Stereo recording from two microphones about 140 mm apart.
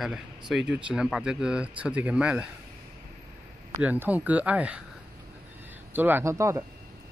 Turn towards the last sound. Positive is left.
turn(degrees=-20)  # may be behind; listen again after turning